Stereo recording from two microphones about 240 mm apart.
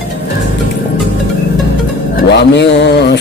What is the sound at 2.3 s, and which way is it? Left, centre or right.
Speech, left.